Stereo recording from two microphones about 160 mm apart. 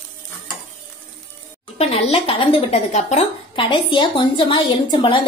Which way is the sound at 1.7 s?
40° left (ahead or behind).